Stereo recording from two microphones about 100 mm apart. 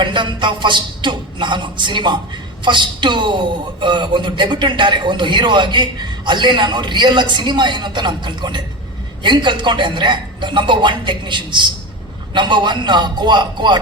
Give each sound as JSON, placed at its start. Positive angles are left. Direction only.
{"t": 0.0, "sound": "a man's voice", "side_deg": -55}